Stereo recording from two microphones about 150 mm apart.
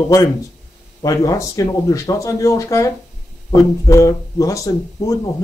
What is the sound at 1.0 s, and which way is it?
Speech, 20° left (ahead or behind).